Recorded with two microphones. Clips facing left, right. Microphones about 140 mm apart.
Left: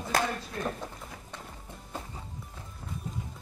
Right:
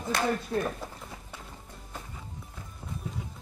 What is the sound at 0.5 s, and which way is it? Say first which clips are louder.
Speech: right 7 dB; 30° right (ahead or behind).